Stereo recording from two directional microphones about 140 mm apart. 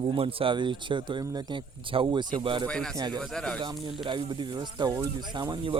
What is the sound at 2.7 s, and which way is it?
Speech, 5° left (ahead or behind).